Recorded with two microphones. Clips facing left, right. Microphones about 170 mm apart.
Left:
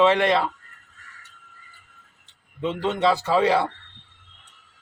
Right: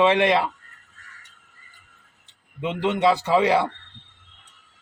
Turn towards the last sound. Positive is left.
turn(degrees=-15)  # may be behind; listen again after turning